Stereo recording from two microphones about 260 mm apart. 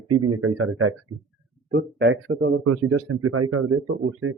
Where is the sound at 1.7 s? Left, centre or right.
Right.